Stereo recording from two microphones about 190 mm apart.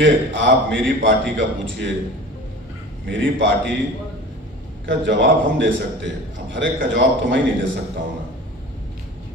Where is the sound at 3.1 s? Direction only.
75° right (ahead or behind).